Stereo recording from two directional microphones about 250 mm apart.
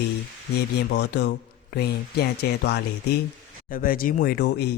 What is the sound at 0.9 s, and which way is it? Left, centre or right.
Speech, left.